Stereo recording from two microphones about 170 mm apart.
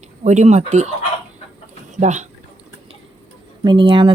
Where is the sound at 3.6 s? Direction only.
25° right (ahead or behind).